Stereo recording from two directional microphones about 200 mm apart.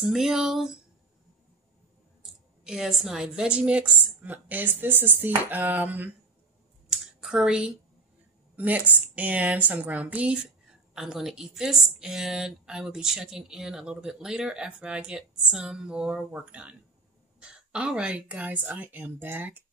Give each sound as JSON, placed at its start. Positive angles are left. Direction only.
{"t": 0.0, "sound": "a woman's voice", "side_deg": 0}
{"t": 2.6, "sound": "a woman's voice", "side_deg": 0}
{"t": 6.9, "sound": "a sound", "side_deg": -5}
{"t": 8.5, "sound": "a woman's voice", "side_deg": -10}